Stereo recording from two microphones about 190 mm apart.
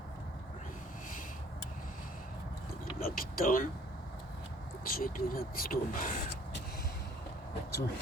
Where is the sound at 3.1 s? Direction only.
45° left (ahead or behind).